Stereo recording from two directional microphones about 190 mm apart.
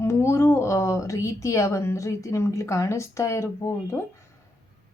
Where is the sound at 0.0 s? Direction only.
15° left (ahead or behind).